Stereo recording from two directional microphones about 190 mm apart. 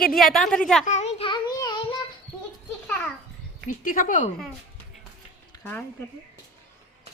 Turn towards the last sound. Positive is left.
turn(degrees=10)  # may be behind; listen again after turning